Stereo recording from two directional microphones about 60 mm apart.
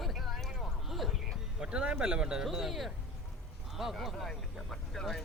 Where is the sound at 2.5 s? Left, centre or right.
Centre.